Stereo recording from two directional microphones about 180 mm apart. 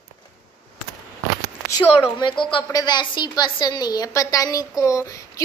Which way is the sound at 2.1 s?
25° left (ahead or behind).